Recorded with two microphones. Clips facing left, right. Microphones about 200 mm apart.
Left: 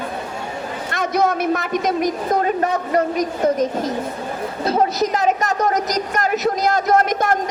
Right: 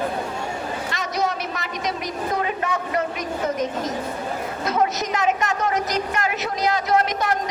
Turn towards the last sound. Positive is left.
turn(degrees=45)  # may be behind; listen again after turning